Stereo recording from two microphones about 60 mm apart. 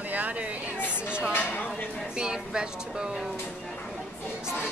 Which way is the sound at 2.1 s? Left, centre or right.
Centre.